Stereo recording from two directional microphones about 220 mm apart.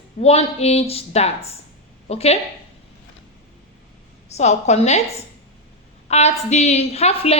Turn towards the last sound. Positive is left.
turn(degrees=30)  # may be behind; listen again after turning